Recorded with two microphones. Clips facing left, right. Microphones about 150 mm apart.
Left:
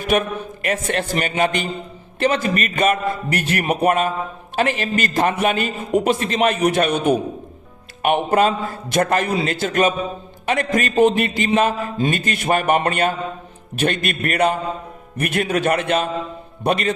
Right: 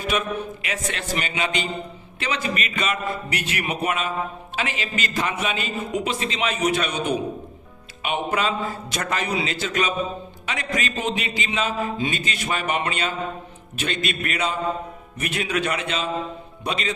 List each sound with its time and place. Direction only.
0.0 s a man's voice: 50° left (ahead or behind)